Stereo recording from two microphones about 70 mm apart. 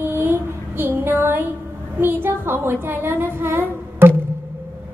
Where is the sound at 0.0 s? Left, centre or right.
Right.